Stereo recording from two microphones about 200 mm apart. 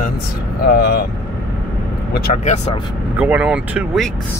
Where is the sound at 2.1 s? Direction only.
50° left (ahead or behind).